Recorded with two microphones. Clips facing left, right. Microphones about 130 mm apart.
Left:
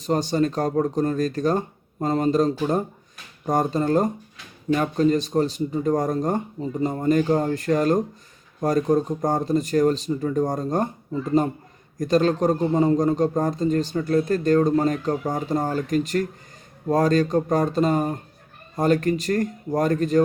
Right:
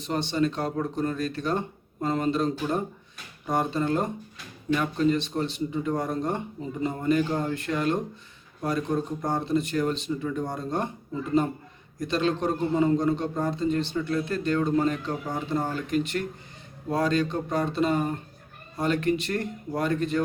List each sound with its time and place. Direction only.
0.0 s a man's voice: 40° left (ahead or behind)